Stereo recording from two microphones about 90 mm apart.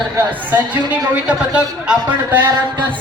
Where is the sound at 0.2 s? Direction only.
20° right (ahead or behind).